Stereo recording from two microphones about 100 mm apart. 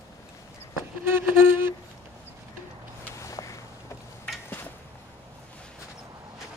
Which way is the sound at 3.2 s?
30° left (ahead or behind).